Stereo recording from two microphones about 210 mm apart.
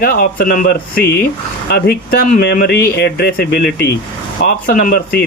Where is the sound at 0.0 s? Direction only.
45° left (ahead or behind).